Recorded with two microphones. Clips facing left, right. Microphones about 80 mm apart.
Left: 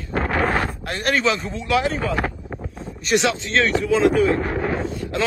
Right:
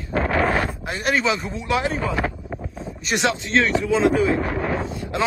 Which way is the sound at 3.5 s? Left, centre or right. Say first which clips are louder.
Even; centre.